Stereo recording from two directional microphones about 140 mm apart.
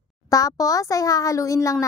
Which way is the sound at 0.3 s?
25° left (ahead or behind).